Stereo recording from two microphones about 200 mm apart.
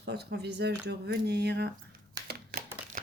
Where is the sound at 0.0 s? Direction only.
55° right (ahead or behind).